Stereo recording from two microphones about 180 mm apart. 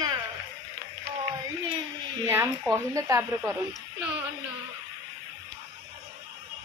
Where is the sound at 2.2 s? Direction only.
15° right (ahead or behind).